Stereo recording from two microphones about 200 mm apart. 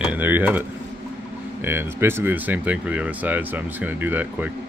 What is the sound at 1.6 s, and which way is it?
Speech, 10° right (ahead or behind).